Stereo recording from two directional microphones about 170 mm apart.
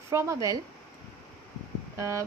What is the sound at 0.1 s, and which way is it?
Speech, 15° right (ahead or behind).